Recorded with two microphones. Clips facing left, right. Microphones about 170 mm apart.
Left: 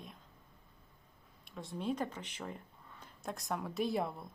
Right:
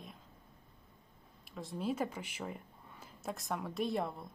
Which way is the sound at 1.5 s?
Centre (ahead or behind).